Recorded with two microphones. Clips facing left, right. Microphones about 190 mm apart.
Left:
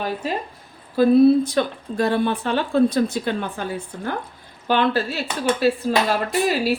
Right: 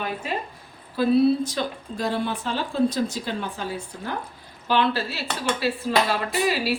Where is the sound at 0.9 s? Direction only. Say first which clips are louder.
Left 5 dB; 50° left (ahead or behind).